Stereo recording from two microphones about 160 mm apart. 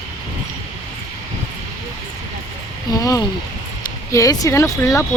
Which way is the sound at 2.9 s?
25° left (ahead or behind).